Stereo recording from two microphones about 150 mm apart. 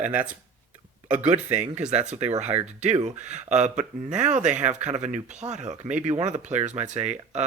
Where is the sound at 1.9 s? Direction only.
50° right (ahead or behind).